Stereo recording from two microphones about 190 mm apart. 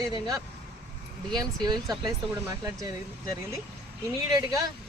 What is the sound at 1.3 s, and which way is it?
Speech, 20° right (ahead or behind).